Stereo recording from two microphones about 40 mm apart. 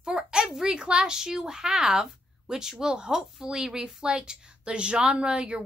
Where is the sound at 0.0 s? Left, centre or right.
Centre.